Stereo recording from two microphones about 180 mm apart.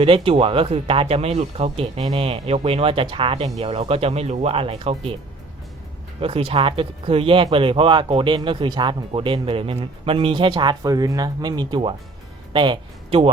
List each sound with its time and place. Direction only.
0.0 s speech: 30° right (ahead or behind)
6.1 s speech: 30° right (ahead or behind)